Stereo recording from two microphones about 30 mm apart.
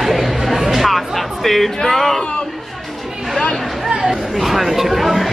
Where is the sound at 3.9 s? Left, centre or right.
Right.